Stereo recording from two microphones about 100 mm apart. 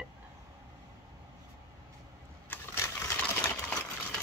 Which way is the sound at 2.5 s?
20° left (ahead or behind).